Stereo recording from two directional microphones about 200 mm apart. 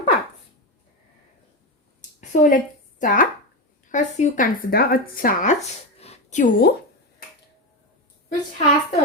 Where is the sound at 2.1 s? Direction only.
40° left (ahead or behind).